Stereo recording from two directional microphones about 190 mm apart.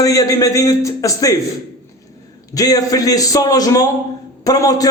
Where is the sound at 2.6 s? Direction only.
20° left (ahead or behind).